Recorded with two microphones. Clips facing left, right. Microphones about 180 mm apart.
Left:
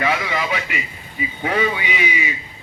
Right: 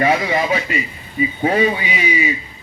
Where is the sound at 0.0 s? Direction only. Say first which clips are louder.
Right 5 dB; 35° right (ahead or behind).